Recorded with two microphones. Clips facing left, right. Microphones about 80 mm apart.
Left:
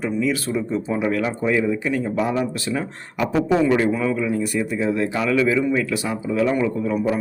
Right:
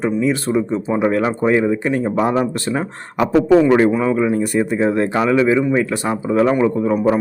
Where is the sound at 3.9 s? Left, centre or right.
Right.